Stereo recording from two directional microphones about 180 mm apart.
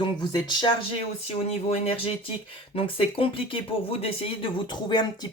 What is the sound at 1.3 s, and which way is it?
Speech, 35° left (ahead or behind).